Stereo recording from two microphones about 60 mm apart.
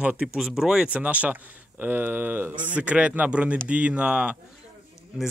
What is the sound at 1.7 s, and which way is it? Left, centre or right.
Speech, right.